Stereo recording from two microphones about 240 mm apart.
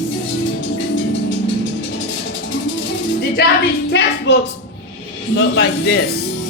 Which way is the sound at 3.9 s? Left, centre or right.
Left.